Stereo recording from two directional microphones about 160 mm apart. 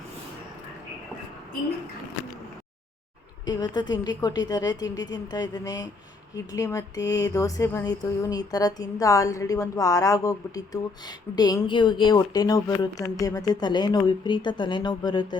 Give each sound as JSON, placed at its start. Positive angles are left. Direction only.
{"t": 3.4, "sound": "speech", "side_deg": 25}